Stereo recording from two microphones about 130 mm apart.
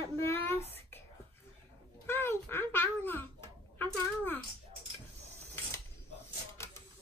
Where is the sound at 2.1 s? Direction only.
15° left (ahead or behind).